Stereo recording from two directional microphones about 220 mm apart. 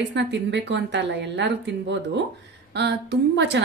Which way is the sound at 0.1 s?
55° right (ahead or behind).